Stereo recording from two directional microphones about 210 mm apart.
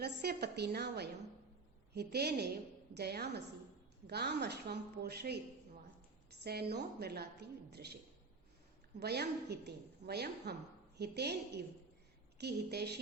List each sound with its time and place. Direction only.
0.0 s a woman's voice: 50° right (ahead or behind)
6.4 s a woman's voice: 50° right (ahead or behind)
9.0 s a woman's voice: 50° right (ahead or behind)